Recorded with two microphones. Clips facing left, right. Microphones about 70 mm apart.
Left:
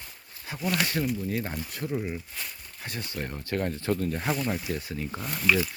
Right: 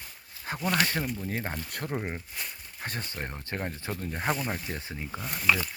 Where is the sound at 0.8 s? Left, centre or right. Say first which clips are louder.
Left 1 dB; right.